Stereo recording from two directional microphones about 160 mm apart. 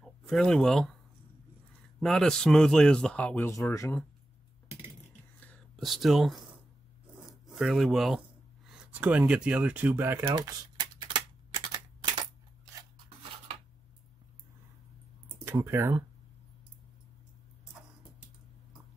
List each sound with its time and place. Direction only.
0.0 s speech: centre (ahead or behind)
2.0 s speech: centre (ahead or behind)
5.4 s whispering: 5° left (ahead or behind)
7.4 s speech: 5° right (ahead or behind)
10.3 s typewriter: 25° right (ahead or behind)
15.4 s speech: 15° right (ahead or behind)